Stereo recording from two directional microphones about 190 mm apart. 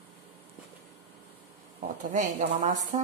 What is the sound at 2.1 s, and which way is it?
Speech, 40° right (ahead or behind).